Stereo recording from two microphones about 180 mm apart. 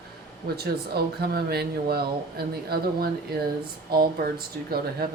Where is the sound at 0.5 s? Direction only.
60° right (ahead or behind).